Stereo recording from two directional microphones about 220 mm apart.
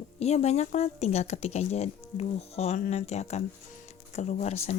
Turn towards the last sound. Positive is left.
turn(degrees=30)  # may be behind; listen again after turning